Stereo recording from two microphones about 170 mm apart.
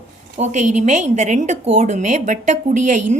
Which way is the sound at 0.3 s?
45° right (ahead or behind).